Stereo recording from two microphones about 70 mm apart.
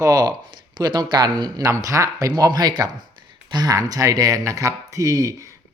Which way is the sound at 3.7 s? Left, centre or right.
Right.